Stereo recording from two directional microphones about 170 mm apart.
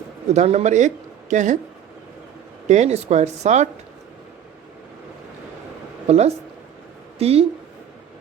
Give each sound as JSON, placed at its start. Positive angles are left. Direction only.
{"t": 0.3, "sound": "speech", "side_deg": -40}
{"t": 2.6, "sound": "speech", "side_deg": -40}
{"t": 6.1, "sound": "speech", "side_deg": -40}